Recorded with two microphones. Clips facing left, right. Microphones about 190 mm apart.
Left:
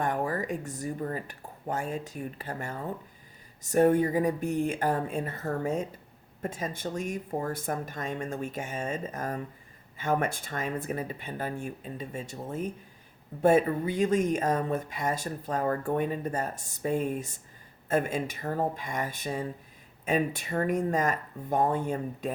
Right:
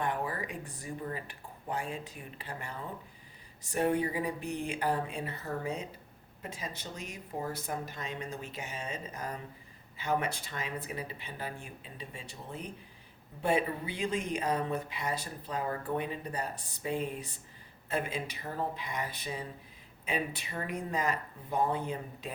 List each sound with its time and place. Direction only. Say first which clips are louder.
0.0 s speech: left 5 dB; 45° left (ahead or behind)